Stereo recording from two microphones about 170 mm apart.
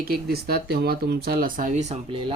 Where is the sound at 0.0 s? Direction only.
65° right (ahead or behind); by 2.0 s 45° right (ahead or behind).